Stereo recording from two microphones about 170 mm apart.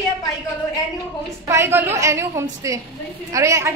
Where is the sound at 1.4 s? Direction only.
15° right (ahead or behind).